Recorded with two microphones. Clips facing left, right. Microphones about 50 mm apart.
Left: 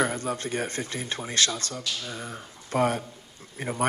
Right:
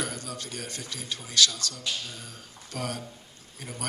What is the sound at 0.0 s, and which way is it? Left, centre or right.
Speech, left.